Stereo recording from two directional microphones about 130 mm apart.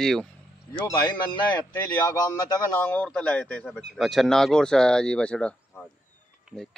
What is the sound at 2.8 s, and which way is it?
Speech, 10° left (ahead or behind).